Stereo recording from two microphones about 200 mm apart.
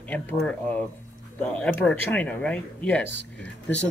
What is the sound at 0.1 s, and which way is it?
Speech, 5° left (ahead or behind).